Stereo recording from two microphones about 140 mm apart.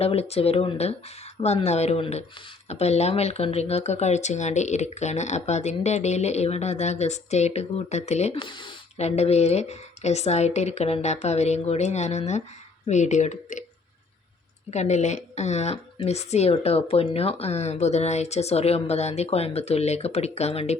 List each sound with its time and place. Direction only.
0.0 s a woman's voice: 45° left (ahead or behind)
8.4 s speech: 35° left (ahead or behind)
9.0 s a woman's voice: 50° left (ahead or behind)
14.7 s a woman's voice: 55° left (ahead or behind)